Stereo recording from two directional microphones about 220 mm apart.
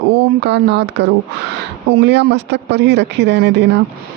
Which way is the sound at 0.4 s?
50° right (ahead or behind).